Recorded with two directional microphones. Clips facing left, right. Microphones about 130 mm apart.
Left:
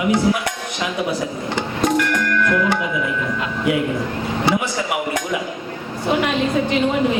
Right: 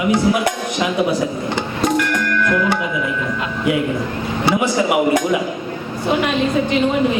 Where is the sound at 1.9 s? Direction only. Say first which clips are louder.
Even; 15° right (ahead or behind).